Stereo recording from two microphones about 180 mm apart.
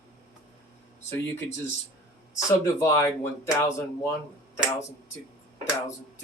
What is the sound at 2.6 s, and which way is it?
Speech, 15° left (ahead or behind).